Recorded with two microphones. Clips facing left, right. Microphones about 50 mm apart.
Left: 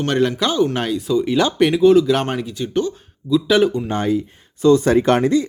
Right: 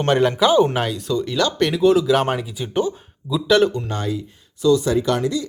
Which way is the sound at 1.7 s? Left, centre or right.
Centre.